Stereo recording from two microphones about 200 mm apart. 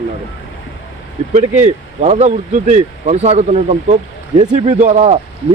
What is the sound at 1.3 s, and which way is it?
Speech, 35° right (ahead or behind).